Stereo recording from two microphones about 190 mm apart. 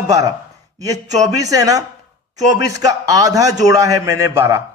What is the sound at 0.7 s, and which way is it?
Speech, 20° right (ahead or behind).